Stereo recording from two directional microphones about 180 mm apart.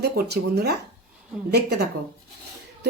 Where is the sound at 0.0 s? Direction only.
65° right (ahead or behind).